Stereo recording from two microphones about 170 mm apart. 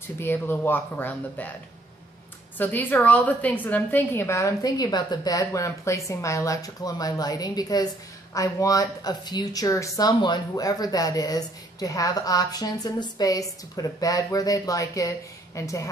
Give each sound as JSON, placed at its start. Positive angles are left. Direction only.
{"t": 0.2, "sound": "speech", "side_deg": 15}
{"t": 2.5, "sound": "a woman's voice", "side_deg": 10}